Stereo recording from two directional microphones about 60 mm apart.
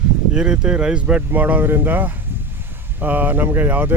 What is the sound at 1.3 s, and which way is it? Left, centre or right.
A man's voice, right.